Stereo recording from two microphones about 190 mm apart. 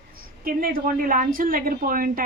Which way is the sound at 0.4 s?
50° right (ahead or behind).